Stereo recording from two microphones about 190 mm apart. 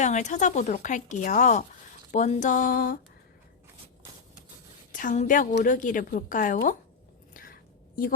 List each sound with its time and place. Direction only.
0.0 s a woman's voice: 40° left (ahead or behind)
4.9 s a woman's voice: 45° left (ahead or behind)
7.3 s a sound: 50° left (ahead or behind)